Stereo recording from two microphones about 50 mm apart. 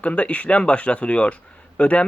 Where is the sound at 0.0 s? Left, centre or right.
Left.